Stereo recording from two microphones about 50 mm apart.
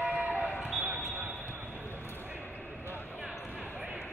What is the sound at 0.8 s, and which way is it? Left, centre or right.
Basketball bounce, right.